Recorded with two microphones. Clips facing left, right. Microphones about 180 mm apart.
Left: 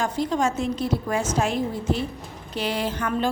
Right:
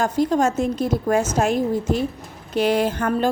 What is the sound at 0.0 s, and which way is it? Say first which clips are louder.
A woman's voice: right 5 dB; 45° right (ahead or behind).